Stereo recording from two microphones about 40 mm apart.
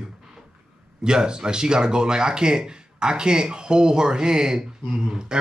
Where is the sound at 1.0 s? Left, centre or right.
Centre.